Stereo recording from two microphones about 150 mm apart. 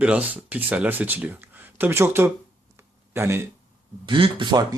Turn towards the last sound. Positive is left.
turn(degrees=-30)  # may be behind; listen again after turning